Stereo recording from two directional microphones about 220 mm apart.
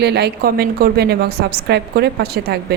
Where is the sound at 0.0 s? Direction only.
50° right (ahead or behind).